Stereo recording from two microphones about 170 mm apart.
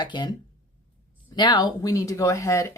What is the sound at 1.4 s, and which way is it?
Speech, 25° left (ahead or behind).